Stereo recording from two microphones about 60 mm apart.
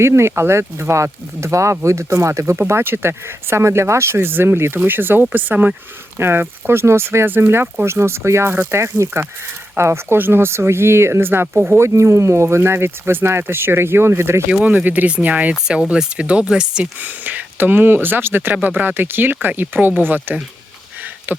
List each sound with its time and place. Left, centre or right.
0.0 s speech: right
2.6 s speech: right
6.1 s speech: right
11.9 s speech: right
14.5 s speech: right
15.6 s speech: centre
17.0 s speech: right
21.3 s a sound: right